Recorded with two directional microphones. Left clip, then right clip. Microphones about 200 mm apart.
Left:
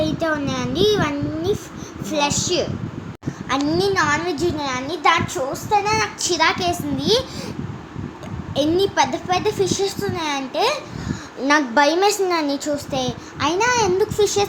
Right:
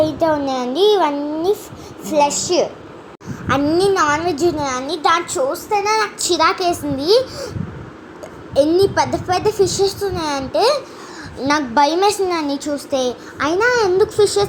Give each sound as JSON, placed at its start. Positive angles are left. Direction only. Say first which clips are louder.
{"t": 0.0, "sound": "a child's voice", "louder": "right 5 dB", "side_deg": -5}
{"t": 8.5, "sound": "a child's voice", "louder": "right 4 dB", "side_deg": -5}
{"t": 14.0, "sound": "a child's voice", "louder": "right 4 dB", "side_deg": 20}